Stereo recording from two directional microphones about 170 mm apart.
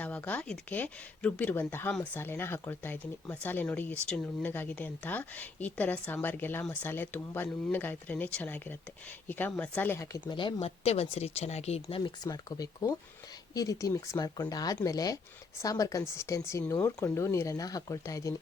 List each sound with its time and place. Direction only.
0.0 s speech: 10° left (ahead or behind)